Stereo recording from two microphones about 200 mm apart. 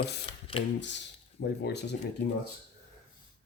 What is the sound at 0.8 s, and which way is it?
Speech, 60° left (ahead or behind).